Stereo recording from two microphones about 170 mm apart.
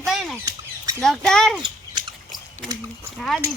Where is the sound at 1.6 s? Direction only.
30° right (ahead or behind).